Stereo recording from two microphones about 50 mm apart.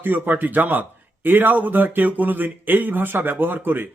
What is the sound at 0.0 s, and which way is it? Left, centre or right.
A man's voice, right.